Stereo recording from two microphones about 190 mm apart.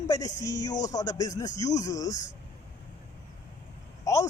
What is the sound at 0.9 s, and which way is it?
Speech, 20° left (ahead or behind).